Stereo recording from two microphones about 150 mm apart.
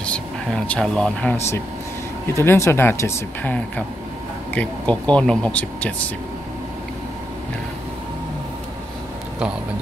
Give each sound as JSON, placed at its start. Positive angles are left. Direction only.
{"t": 0.0, "sound": "speech", "side_deg": 5}
{"t": 2.3, "sound": "speech", "side_deg": 15}
{"t": 4.6, "sound": "speech", "side_deg": 10}